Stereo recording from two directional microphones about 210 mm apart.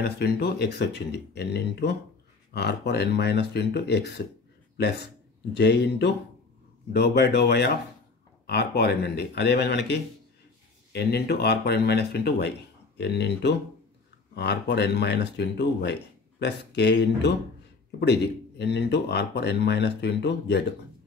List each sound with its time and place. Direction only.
0.0 s speech: 50° left (ahead or behind)
5.5 s speech: 55° left (ahead or behind)